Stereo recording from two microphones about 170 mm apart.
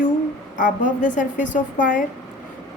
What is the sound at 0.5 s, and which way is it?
A woman's voice, 50° left (ahead or behind).